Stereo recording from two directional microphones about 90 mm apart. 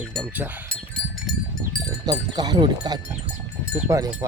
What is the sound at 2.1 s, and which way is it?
Speech, 50° right (ahead or behind).